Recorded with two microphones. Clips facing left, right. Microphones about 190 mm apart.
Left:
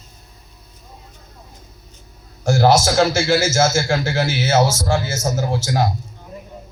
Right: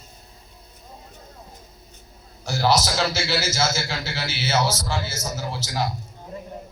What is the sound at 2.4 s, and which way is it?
A man's voice, 50° left (ahead or behind).